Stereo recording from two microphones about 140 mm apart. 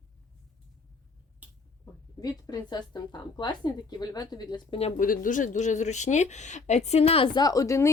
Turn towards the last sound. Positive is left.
turn(degrees=20)  # may be behind; listen again after turning